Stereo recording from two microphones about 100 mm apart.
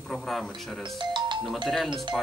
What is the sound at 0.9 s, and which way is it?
Speech, 50° right (ahead or behind).